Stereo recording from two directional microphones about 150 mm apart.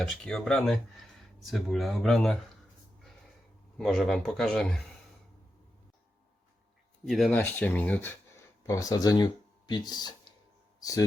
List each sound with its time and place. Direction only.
0.0 s speech: 5° left (ahead or behind)
3.8 s speech: centre (ahead or behind)
7.0 s speech: centre (ahead or behind)
8.6 s speech: 20° left (ahead or behind)
10.8 s a sound: 25° left (ahead or behind)